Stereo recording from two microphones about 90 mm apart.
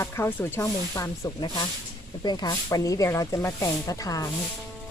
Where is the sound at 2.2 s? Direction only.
50° left (ahead or behind).